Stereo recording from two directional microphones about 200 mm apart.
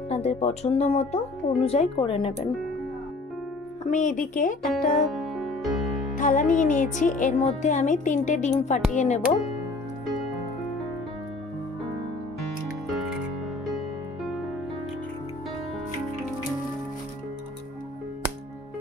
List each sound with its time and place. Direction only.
0.1 s speech: 35° left (ahead or behind)
3.9 s speech: 40° left (ahead or behind)
5.1 s music: centre (ahead or behind)
6.1 s speech: 40° left (ahead or behind)
12.8 s music: centre (ahead or behind)